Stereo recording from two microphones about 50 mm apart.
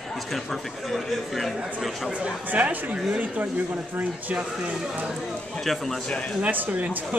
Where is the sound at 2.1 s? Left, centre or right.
Right.